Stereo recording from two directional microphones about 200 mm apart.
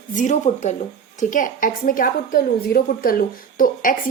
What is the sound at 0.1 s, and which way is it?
A woman's voice, 40° left (ahead or behind).